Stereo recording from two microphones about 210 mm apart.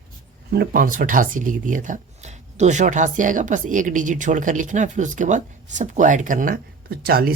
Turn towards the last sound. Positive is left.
turn(degrees=-45)  # may be behind; listen again after turning